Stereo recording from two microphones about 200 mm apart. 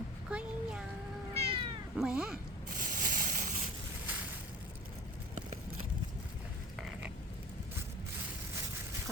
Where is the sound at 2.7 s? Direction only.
45° right (ahead or behind).